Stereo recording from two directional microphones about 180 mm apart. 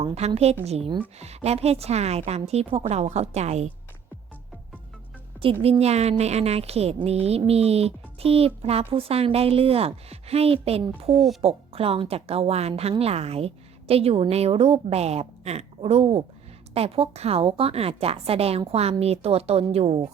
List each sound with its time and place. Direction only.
0.0 s speech: 35° right (ahead or behind)
5.6 s speech: 35° right (ahead or behind)
11.1 s speech: centre (ahead or behind)
11.4 s speech: 30° right (ahead or behind)